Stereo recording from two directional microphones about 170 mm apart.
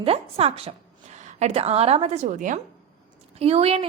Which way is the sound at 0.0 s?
35° right (ahead or behind).